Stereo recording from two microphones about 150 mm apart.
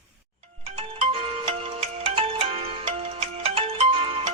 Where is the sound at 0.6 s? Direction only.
45° right (ahead or behind).